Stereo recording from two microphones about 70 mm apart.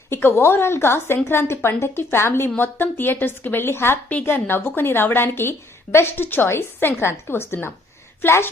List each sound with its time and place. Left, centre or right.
0.1 s a woman's voice: left